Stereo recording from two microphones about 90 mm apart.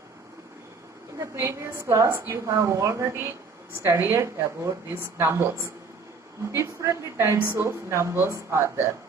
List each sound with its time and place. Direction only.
1.2 s a woman's voice: 30° right (ahead or behind)